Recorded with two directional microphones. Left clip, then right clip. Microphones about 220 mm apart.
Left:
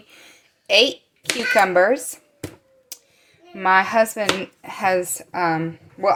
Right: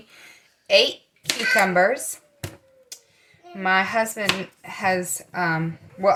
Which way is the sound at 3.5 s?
40° left (ahead or behind).